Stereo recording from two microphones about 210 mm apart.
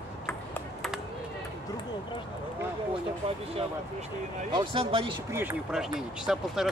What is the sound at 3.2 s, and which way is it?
Speech, 25° right (ahead or behind).